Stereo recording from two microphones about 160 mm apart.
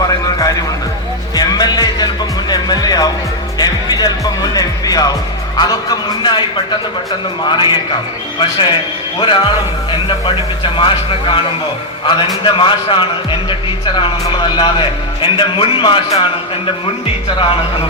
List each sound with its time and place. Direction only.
1.4 s music: 25° left (ahead or behind)
5.5 s a man's voice: 25° left (ahead or behind)
7.4 s a man's voice: 30° left (ahead or behind)